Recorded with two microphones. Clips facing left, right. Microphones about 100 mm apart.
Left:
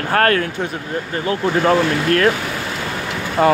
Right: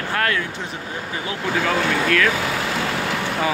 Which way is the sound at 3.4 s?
45° left (ahead or behind).